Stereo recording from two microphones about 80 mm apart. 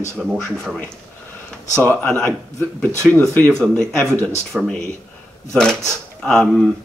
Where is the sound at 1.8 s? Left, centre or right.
Centre.